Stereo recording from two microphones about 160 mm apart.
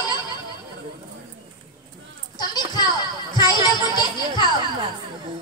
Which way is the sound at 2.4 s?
25° left (ahead or behind).